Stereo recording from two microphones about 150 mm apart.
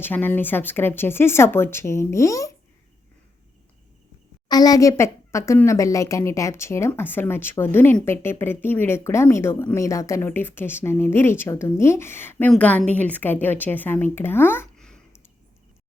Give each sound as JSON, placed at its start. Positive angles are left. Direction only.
{"t": 0.0, "sound": "speech", "side_deg": 15}
{"t": 4.4, "sound": "speech", "side_deg": 25}
{"t": 14.8, "sound": "a sound", "side_deg": 5}